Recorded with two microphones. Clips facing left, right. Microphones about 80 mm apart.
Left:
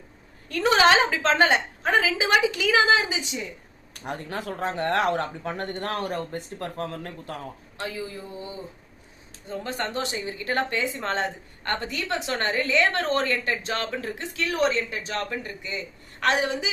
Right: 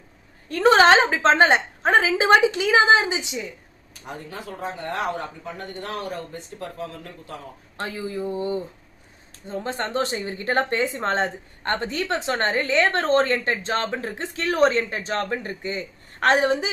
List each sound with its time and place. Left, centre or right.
0.4 s a woman's voice: right
3.9 s speech: left
7.8 s speech: right
9.5 s a woman's voice: right